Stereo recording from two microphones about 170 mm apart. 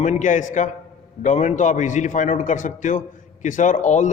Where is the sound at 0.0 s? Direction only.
45° left (ahead or behind).